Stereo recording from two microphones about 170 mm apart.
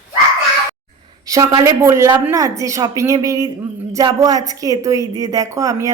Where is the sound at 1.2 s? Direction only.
20° right (ahead or behind).